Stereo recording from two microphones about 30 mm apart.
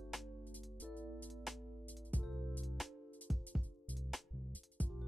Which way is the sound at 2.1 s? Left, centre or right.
Left.